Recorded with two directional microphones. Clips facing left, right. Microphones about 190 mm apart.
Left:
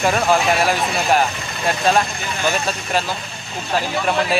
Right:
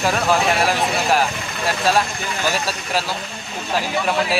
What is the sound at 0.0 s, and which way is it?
A man's voice, centre (ahead or behind).